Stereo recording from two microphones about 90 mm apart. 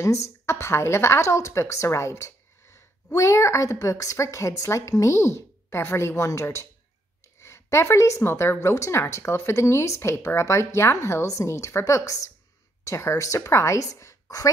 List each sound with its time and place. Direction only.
0.0 s speech: 30° left (ahead or behind)